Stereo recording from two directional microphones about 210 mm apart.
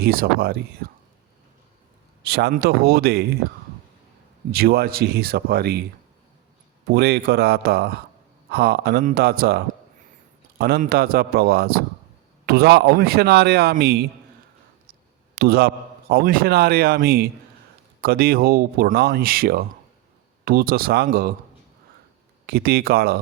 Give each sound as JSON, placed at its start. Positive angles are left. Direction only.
{"t": 0.0, "sound": "a man's voice", "side_deg": -45}
{"t": 2.2, "sound": "a man's voice", "side_deg": -50}
{"t": 4.5, "sound": "a man's voice", "side_deg": -45}
{"t": 6.8, "sound": "a man's voice", "side_deg": -50}
{"t": 15.4, "sound": "a man's voice", "side_deg": -50}
{"t": 22.4, "sound": "a man's voice", "side_deg": -45}